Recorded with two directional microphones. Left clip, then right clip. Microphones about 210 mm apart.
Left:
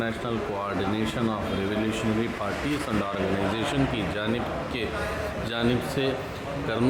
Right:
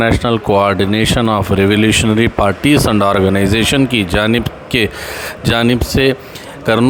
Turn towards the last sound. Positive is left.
turn(degrees=-50)  # may be behind; listen again after turning